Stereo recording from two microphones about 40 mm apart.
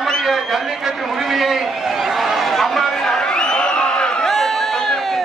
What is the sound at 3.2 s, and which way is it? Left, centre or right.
Crowd, left.